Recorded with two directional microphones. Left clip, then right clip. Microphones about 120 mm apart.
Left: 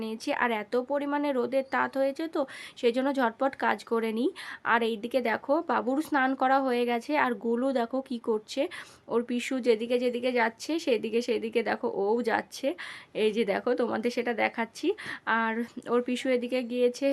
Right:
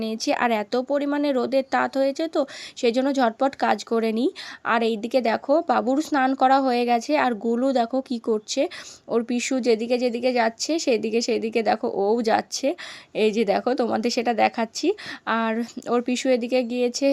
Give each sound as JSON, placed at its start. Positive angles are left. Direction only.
{"t": 0.0, "sound": "speech", "side_deg": -35}
{"t": 7.4, "sound": "a woman's voice", "side_deg": -20}